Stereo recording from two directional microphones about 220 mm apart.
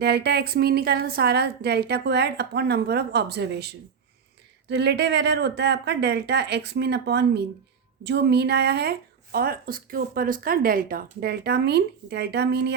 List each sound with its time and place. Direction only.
0.0 s speech: 50° right (ahead or behind)